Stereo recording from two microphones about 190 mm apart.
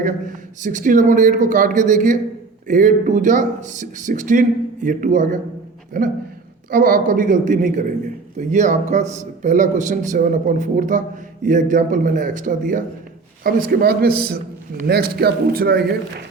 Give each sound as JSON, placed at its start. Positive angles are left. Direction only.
{"t": 0.0, "sound": "a man's voice", "side_deg": -45}